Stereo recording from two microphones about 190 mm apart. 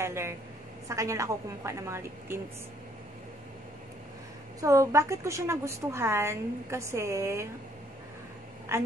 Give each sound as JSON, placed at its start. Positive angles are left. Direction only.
{"t": 0.0, "sound": "a woman's voice", "side_deg": -15}
{"t": 4.6, "sound": "a woman's voice", "side_deg": -15}
{"t": 8.7, "sound": "a woman's voice", "side_deg": -15}